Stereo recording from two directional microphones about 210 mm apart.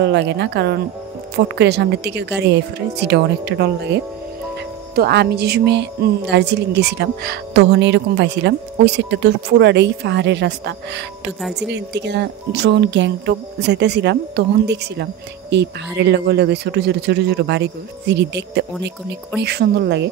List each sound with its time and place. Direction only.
0.0 s speech: 55° right (ahead or behind)